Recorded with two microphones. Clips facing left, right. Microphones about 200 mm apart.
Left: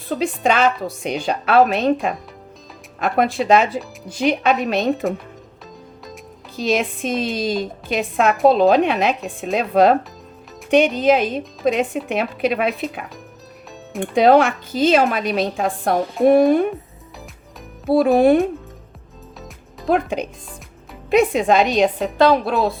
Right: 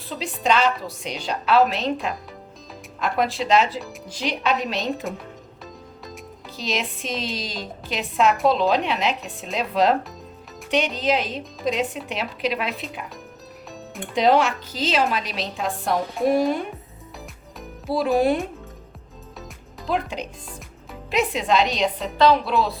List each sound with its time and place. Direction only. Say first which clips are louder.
0.1 s a woman's voice: left 4 dB; 55° left (ahead or behind)
6.6 s a woman's voice: left 8 dB; 50° left (ahead or behind)
14.0 s a woman's voice: left 5 dB; 55° left (ahead or behind)
17.8 s a woman's voice: left 6 dB; 55° left (ahead or behind)
19.9 s a woman's voice: left 7 dB; 55° left (ahead or behind)